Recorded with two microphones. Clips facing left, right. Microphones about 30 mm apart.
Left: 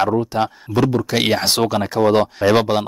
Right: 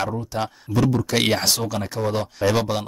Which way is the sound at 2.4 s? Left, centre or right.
Left.